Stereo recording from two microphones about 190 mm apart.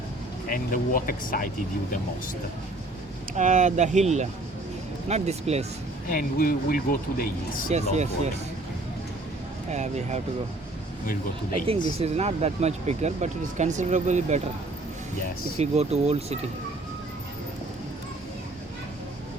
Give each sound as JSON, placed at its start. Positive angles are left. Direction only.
{"t": 0.4, "sound": "speech", "side_deg": 45}
{"t": 3.3, "sound": "speech", "side_deg": -40}
{"t": 6.1, "sound": "speech", "side_deg": 50}
{"t": 7.7, "sound": "speech", "side_deg": -35}
{"t": 9.7, "sound": "speech", "side_deg": -35}
{"t": 11.9, "sound": "speech", "side_deg": -35}
{"t": 15.5, "sound": "speech", "side_deg": -35}